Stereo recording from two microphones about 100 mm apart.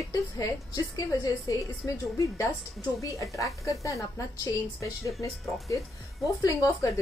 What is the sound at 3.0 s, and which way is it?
A woman's voice, 30° left (ahead or behind).